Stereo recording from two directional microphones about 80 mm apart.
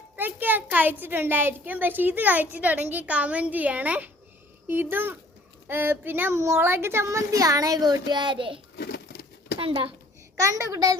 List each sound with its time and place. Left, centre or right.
0.2 s a woman's voice: right
10.4 s a woman's voice: right